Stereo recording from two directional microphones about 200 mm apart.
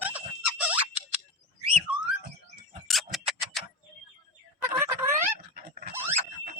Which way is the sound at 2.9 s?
Centre (ahead or behind).